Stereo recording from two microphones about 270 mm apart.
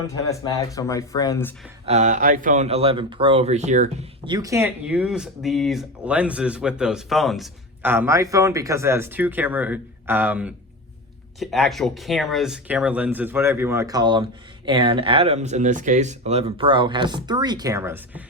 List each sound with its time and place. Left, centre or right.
0.3 s speech: centre
1.9 s speech: right
4.3 s speech: centre